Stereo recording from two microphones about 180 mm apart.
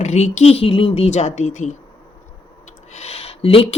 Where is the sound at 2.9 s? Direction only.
35° left (ahead or behind).